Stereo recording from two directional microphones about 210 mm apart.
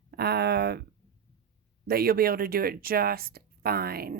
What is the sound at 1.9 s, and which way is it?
Speech, 45° right (ahead or behind).